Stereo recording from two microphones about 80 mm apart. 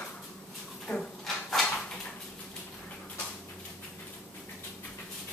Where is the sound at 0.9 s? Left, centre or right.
Centre.